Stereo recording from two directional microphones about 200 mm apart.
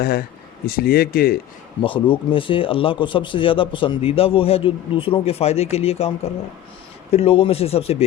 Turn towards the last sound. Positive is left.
turn(degrees=30)  # may be behind; listen again after turning